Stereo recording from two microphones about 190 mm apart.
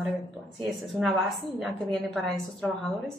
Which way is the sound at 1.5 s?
Centre (ahead or behind).